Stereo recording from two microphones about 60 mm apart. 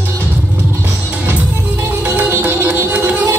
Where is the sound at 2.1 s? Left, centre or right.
Right.